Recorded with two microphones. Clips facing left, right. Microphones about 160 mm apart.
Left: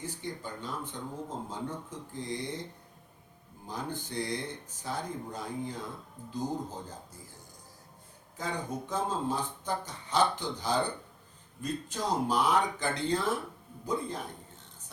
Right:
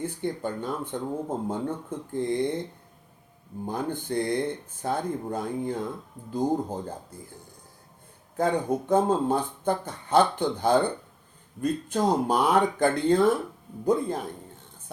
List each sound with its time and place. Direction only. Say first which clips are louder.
0.0 s speech: right 9 dB; 55° right (ahead or behind)
3.7 s speech: right 8 dB; 55° right (ahead or behind)
8.4 s speech: right 11 dB; 55° right (ahead or behind)